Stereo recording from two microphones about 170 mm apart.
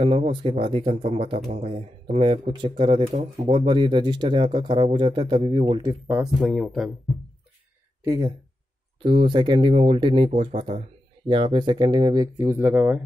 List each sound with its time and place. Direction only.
0.0 s speech: 35° right (ahead or behind)
6.4 s speech: centre (ahead or behind)
8.0 s speech: 25° right (ahead or behind)